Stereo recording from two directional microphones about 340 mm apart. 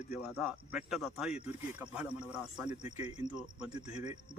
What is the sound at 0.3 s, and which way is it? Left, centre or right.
A man's voice, centre.